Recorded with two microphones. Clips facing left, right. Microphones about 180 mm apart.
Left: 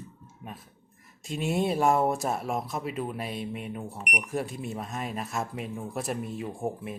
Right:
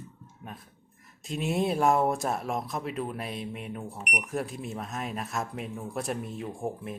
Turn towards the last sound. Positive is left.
turn(degrees=5)  # may be behind; listen again after turning